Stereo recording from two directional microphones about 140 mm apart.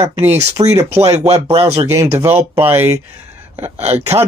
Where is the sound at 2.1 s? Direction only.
15° right (ahead or behind).